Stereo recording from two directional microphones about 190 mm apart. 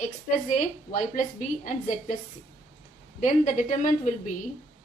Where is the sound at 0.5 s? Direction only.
40° left (ahead or behind).